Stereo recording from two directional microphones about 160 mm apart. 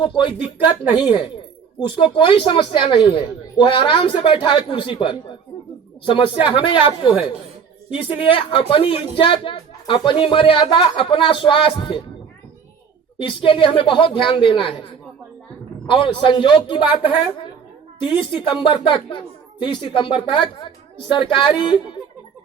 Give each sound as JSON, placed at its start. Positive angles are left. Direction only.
{"t": 0.0, "sound": "a woman's voice", "side_deg": 30}
{"t": 6.4, "sound": "a woman's voice", "side_deg": 30}
{"t": 13.2, "sound": "a woman's voice", "side_deg": 30}
{"t": 15.9, "sound": "a woman's voice", "side_deg": 35}
{"t": 18.0, "sound": "a woman's voice", "side_deg": 30}